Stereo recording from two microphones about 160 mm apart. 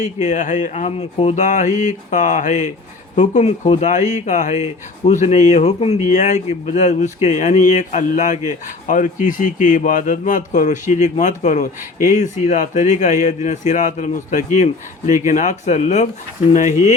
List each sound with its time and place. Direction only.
0.0 s speech: 50° left (ahead or behind)